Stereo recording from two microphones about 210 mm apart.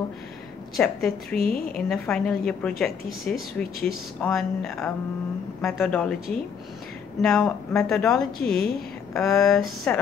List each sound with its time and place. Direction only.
0.7 s a woman's voice: centre (ahead or behind)
1.4 s a woman's voice: 45° left (ahead or behind)
1.9 s a woman's voice: 5° left (ahead or behind)
7.2 s a woman's voice: centre (ahead or behind)